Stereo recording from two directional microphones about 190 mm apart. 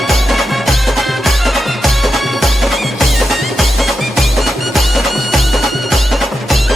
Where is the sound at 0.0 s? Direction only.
Centre (ahead or behind).